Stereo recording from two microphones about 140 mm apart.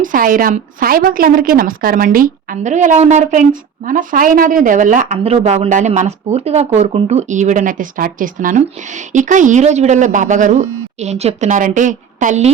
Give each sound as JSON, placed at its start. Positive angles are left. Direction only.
{"t": 0.0, "sound": "a woman's voice", "side_deg": -75}